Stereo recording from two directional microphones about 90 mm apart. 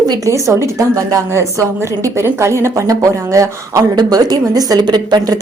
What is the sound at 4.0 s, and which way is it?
Speech, 50° right (ahead or behind).